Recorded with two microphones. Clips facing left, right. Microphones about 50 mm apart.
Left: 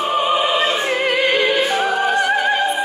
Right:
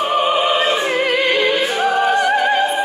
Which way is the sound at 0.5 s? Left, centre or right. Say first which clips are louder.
Right 1 dB; right.